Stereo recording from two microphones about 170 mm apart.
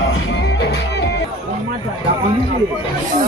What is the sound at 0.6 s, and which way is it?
Music, 75° left (ahead or behind).